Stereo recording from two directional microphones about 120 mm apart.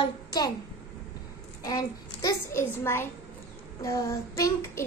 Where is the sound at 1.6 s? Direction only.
30° left (ahead or behind).